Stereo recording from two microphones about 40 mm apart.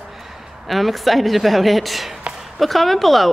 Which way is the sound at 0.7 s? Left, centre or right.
Centre.